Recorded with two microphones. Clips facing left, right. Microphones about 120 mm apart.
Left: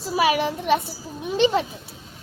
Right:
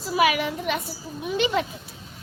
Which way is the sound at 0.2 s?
30° left (ahead or behind).